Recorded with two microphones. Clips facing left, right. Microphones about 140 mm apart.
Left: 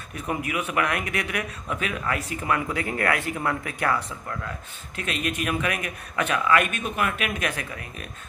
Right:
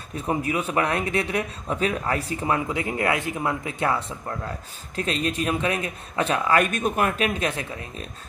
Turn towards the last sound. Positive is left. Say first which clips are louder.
# right 2 dB
turn(degrees=-25)  # may be behind; listen again after turning